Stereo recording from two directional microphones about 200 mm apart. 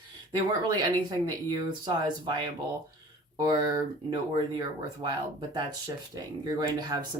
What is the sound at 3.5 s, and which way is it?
Speech, 20° right (ahead or behind).